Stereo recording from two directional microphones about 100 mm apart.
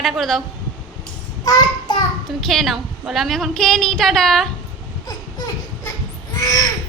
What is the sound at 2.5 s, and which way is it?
A woman's voice, centre (ahead or behind).